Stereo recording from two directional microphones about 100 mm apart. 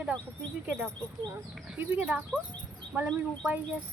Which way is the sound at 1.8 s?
15° right (ahead or behind).